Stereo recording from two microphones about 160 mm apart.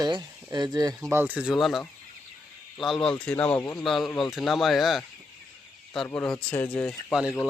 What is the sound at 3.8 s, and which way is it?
Speech, centre (ahead or behind).